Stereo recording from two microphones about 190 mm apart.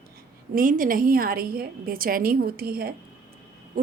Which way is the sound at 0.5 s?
45° right (ahead or behind).